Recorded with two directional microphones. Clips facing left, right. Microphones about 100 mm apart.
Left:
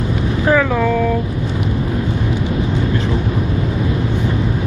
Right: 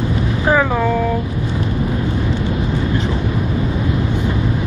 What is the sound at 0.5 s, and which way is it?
Speech, 20° right (ahead or behind).